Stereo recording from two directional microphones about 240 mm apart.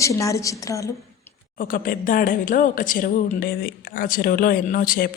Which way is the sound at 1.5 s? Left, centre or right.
Left.